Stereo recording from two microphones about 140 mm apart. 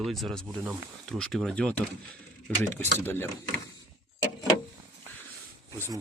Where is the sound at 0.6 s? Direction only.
15° right (ahead or behind).